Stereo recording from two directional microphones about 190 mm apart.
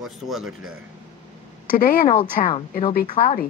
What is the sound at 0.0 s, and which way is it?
Speech, centre (ahead or behind).